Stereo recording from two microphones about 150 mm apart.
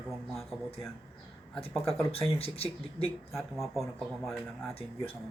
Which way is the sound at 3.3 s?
Centre (ahead or behind).